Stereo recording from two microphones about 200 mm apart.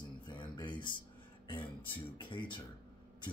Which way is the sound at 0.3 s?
25° left (ahead or behind).